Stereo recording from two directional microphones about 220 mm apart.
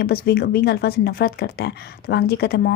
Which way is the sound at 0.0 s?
45° left (ahead or behind).